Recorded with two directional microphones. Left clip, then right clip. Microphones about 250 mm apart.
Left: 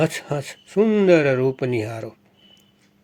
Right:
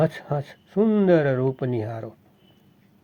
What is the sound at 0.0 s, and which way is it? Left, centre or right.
Speech, left.